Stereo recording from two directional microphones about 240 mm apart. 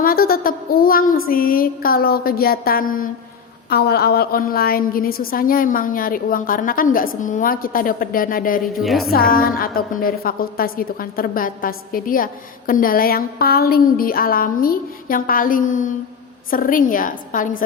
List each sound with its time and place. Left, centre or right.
0.0 s a woman's voice: left
8.8 s speech: centre
9.1 s a woman's voice: left